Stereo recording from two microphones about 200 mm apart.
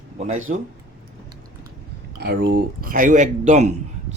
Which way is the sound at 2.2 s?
50° right (ahead or behind).